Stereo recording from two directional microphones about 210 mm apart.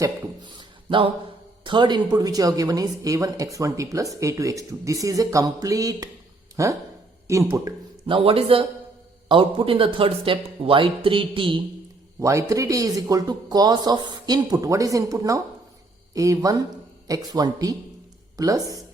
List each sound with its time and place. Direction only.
0.9 s speech: 25° right (ahead or behind)
8.0 s speech: 25° right (ahead or behind)